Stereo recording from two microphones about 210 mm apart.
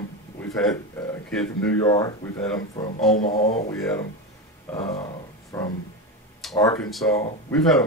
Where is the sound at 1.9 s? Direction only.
15° left (ahead or behind).